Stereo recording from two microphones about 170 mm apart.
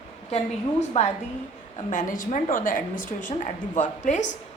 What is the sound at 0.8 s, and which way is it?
A woman's voice, 40° left (ahead or behind).